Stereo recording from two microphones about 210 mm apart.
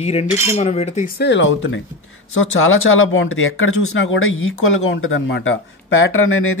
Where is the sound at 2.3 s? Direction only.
75° left (ahead or behind).